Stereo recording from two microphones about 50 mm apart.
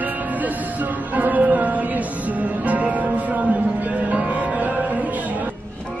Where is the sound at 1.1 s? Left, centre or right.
Right.